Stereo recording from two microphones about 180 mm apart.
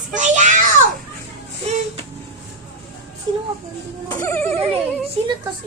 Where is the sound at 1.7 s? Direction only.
35° right (ahead or behind).